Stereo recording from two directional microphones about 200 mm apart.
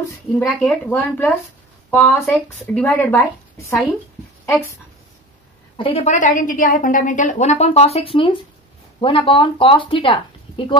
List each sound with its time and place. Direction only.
0.7 s speech: 10° left (ahead or behind)
5.8 s a woman's voice: 25° left (ahead or behind)